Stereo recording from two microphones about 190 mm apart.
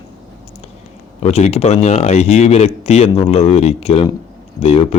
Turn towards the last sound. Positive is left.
turn(degrees=30)  # may be behind; listen again after turning